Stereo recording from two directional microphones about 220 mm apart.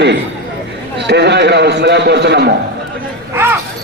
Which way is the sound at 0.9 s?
50° right (ahead or behind).